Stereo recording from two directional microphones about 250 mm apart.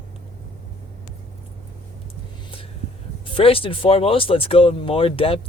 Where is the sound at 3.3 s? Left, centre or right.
Left.